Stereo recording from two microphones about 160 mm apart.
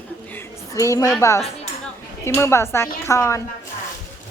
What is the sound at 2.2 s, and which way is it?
A woman's voice, 15° left (ahead or behind).